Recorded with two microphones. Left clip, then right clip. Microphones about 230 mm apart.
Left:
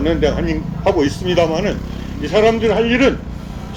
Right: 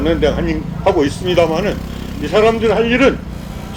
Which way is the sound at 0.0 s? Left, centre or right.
Centre.